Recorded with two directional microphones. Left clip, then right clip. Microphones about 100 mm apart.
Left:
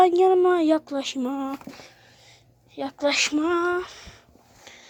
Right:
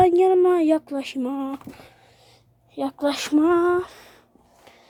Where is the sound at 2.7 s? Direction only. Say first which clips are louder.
Left 1 dB; 50° right (ahead or behind).